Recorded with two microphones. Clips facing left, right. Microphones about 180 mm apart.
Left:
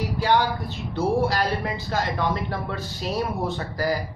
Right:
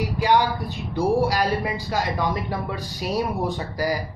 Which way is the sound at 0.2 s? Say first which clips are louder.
Right 2 dB; 15° right (ahead or behind).